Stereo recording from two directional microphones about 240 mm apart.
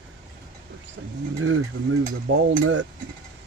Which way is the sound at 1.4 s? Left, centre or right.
Right.